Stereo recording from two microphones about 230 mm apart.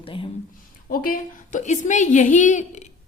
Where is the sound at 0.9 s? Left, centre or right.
Left.